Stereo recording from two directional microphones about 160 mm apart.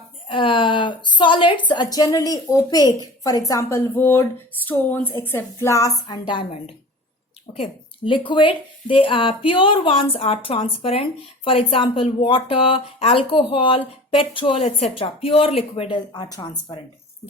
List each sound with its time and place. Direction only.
0.3 s a woman's voice: 30° left (ahead or behind)